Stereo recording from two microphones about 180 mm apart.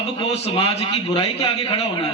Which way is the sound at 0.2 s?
30° left (ahead or behind).